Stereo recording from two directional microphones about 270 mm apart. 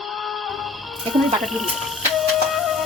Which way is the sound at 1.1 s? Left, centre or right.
Centre.